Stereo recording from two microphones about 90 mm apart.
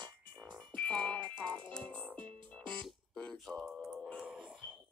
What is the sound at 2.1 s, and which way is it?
Music, 65° right (ahead or behind).